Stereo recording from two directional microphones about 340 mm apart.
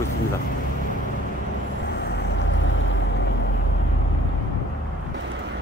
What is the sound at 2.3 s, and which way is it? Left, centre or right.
Vehicle, left.